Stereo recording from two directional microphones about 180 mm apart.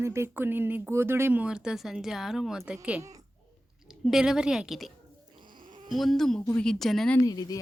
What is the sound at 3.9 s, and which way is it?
Speech, centre (ahead or behind).